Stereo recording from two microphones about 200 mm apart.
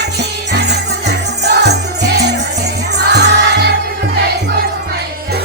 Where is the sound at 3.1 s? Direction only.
55° right (ahead or behind).